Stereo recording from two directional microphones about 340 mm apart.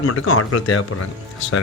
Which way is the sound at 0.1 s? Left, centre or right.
Left.